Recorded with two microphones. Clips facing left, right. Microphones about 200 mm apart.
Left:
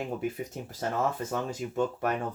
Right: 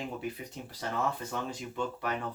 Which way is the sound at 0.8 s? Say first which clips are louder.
Left 4 dB; 45° left (ahead or behind).